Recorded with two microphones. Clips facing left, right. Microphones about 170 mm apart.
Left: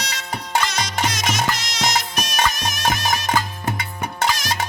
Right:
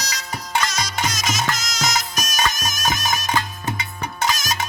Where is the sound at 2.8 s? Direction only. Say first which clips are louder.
Left 2 dB; 55° left (ahead or behind).